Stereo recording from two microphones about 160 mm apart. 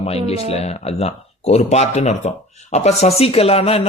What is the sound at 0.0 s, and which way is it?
Speech, 40° left (ahead or behind).